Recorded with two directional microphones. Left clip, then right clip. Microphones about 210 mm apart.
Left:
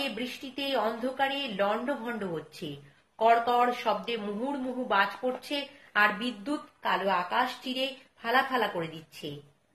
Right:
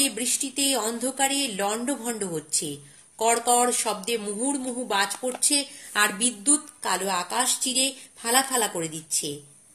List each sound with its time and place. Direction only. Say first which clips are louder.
0.0 s a woman's voice: right 6 dB; 50° right (ahead or behind)